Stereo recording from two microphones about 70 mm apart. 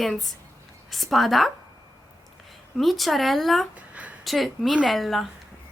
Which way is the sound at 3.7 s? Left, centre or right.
Centre.